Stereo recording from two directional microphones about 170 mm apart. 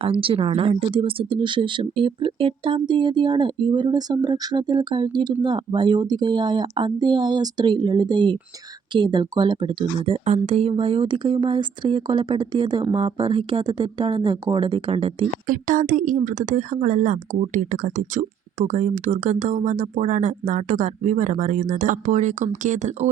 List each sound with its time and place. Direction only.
0.0 s speech: 30° right (ahead or behind)
15.4 s a woman's voice: 50° right (ahead or behind)